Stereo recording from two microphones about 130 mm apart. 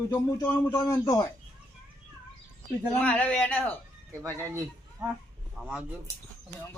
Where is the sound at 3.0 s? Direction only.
10° left (ahead or behind).